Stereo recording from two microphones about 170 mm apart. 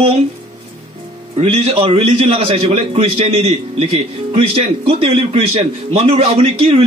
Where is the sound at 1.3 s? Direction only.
30° right (ahead or behind).